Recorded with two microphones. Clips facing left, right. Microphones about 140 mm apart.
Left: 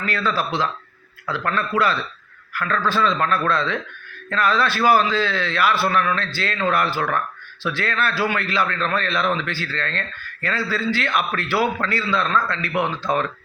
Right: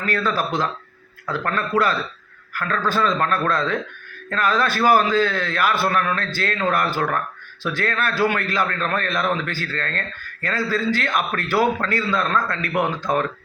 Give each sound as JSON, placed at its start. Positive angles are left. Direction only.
{"t": 0.3, "sound": "a man's voice", "side_deg": -45}